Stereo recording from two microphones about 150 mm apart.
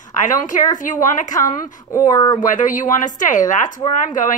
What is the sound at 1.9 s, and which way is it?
Speech, 25° left (ahead or behind).